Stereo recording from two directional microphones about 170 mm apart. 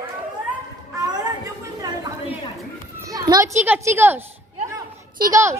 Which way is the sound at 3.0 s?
20° right (ahead or behind).